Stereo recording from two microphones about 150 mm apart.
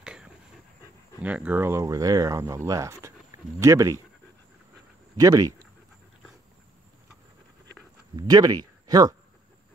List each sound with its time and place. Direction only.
0.0 s pant: 5° right (ahead or behind)
1.2 s speech: 10° right (ahead or behind)
5.1 s speech: 25° right (ahead or behind)
8.2 s speech: 30° right (ahead or behind)